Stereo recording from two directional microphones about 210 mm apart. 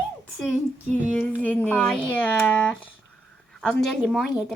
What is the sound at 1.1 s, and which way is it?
Speech, 10° left (ahead or behind).